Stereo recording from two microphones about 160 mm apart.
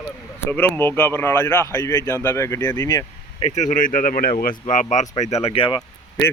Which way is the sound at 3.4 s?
50° left (ahead or behind).